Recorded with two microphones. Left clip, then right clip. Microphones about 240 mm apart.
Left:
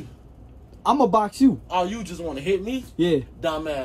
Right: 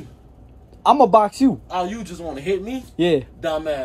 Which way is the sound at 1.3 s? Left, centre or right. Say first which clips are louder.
Even; centre.